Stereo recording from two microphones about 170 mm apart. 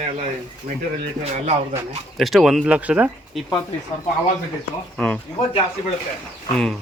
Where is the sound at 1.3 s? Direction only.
45° right (ahead or behind).